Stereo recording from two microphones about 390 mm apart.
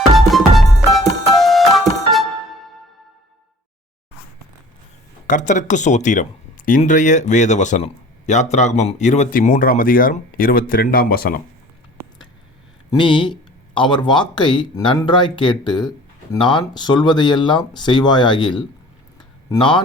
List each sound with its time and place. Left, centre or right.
0.3 s music: centre
5.2 s speech: centre
12.9 s speech: centre